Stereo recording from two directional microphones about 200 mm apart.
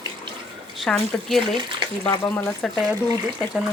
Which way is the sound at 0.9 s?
5° left (ahead or behind).